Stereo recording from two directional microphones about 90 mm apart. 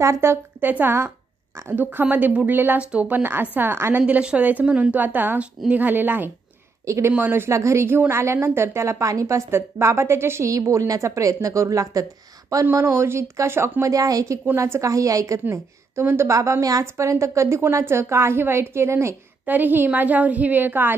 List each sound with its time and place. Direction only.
0.0 s a woman's voice: 30° right (ahead or behind)
4.0 s a woman's voice: 15° right (ahead or behind); by 19.1 s 30° right (ahead or behind)
19.4 s a woman's voice: 20° right (ahead or behind)